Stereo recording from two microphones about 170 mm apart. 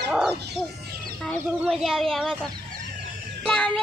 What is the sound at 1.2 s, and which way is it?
A child's voice, centre (ahead or behind).